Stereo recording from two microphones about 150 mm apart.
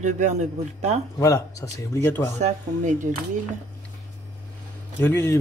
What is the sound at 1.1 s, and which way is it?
Speech, 20° left (ahead or behind).